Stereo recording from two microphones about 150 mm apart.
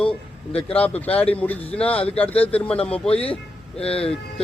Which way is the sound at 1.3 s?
10° left (ahead or behind).